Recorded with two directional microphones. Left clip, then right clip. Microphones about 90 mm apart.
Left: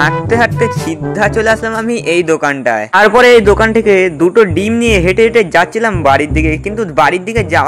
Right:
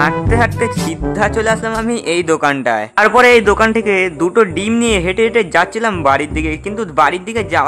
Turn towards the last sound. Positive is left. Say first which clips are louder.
# left 3 dB
turn(degrees=35)  # may be behind; listen again after turning